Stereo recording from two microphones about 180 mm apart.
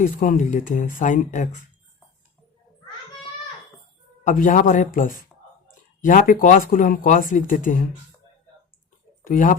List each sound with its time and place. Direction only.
0.0 s speech: 45° left (ahead or behind)
4.2 s speech: 45° left (ahead or behind)
5.3 s whispering: 5° left (ahead or behind)
6.0 s speech: 50° left (ahead or behind)
9.2 s speech: 50° left (ahead or behind)